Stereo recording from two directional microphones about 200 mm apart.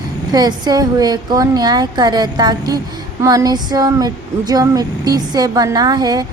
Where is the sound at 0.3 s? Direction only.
20° right (ahead or behind).